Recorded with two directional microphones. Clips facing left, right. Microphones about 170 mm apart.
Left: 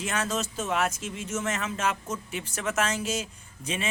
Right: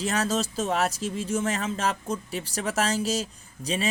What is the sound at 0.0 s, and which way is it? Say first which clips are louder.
Speech: right 4 dB; 35° right (ahead or behind).